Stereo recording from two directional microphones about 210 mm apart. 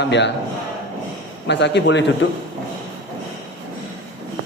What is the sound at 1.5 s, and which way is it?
Speech, 55° left (ahead or behind).